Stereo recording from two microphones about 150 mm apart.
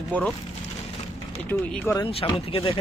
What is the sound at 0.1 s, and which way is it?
Speech, 10° left (ahead or behind).